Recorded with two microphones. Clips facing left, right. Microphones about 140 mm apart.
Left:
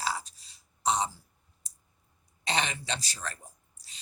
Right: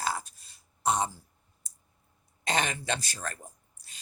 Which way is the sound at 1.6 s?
50° right (ahead or behind).